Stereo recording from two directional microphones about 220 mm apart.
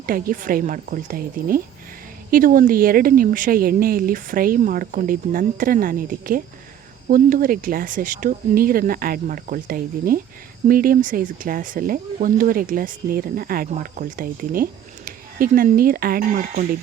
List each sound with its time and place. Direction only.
0.0 s speech: 40° right (ahead or behind)